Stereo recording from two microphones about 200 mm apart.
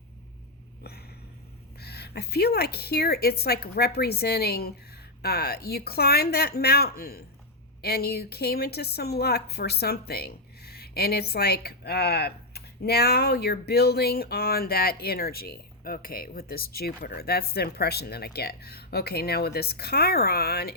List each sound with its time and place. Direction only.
1.8 s a woman's voice: 55° left (ahead or behind)